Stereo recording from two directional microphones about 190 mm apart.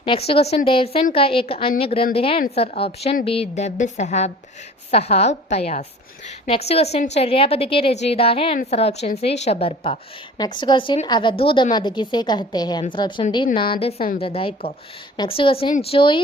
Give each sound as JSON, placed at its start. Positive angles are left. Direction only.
{"t": 0.0, "sound": "a woman's voice", "side_deg": 30}